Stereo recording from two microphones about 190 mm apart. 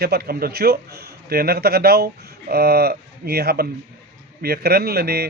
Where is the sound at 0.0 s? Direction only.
55° right (ahead or behind).